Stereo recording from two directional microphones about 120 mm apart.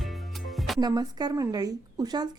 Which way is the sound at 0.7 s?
35° right (ahead or behind).